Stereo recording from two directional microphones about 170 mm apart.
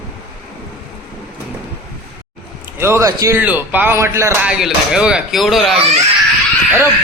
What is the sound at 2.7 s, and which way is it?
A man's voice, 15° right (ahead or behind).